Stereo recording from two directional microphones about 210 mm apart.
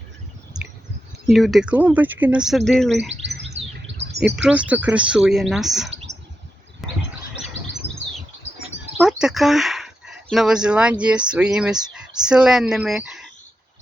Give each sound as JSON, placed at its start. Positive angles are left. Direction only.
{"t": 1.3, "sound": "speech", "side_deg": 0}
{"t": 3.1, "sound": "chirp", "side_deg": -55}
{"t": 3.5, "sound": "bird", "side_deg": -30}
{"t": 4.4, "sound": "speech", "side_deg": -5}
{"t": 6.8, "sound": "bird", "side_deg": 0}
{"t": 7.8, "sound": "bird", "side_deg": 55}
{"t": 9.0, "sound": "speech", "side_deg": -5}